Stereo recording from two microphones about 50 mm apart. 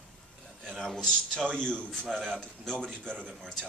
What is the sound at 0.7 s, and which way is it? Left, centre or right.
Speech, centre.